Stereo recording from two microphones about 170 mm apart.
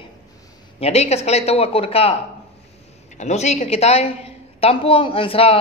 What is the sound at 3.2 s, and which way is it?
A man's voice, 40° left (ahead or behind).